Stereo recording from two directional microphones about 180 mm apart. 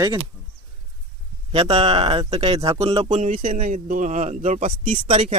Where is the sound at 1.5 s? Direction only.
35° right (ahead or behind).